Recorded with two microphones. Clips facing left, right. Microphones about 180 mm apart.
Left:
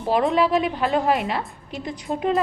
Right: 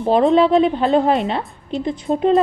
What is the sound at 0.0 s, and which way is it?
A woman's voice, 25° right (ahead or behind).